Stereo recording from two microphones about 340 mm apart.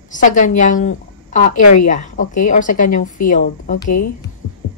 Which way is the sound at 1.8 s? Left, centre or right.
Left.